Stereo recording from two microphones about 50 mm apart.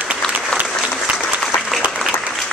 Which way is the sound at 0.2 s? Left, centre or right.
Centre.